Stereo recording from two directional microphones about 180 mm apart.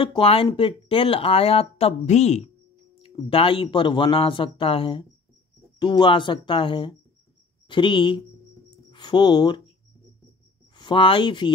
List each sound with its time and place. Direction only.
0.0 s speech: 30° left (ahead or behind)
8.6 s a sound: 25° left (ahead or behind)
10.8 s speech: 30° left (ahead or behind)